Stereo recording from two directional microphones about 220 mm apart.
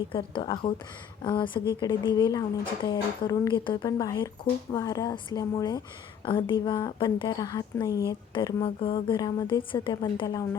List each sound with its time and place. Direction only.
0.1 s a woman's voice: 20° left (ahead or behind)